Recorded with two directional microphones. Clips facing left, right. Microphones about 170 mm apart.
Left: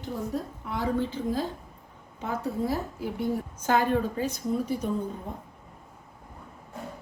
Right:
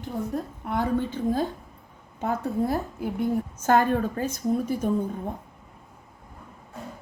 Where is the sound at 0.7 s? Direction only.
55° right (ahead or behind).